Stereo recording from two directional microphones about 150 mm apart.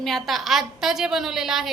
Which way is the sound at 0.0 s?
Centre (ahead or behind).